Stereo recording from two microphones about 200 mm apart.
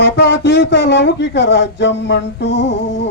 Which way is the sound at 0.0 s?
60° left (ahead or behind).